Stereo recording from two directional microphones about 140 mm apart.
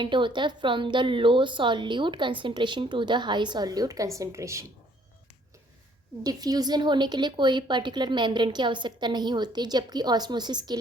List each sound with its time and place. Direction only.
0.0 s a woman's voice: 35° right (ahead or behind)
6.2 s a woman's voice: 25° right (ahead or behind)